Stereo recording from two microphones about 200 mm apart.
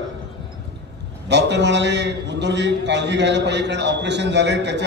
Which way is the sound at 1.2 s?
60° right (ahead or behind).